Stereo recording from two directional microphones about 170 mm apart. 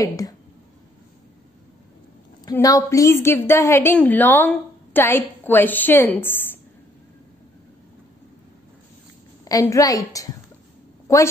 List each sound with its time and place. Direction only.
0.0 s a woman's voice: 20° left (ahead or behind)
2.4 s a woman's voice: 20° left (ahead or behind)
9.4 s a woman's voice: 20° left (ahead or behind)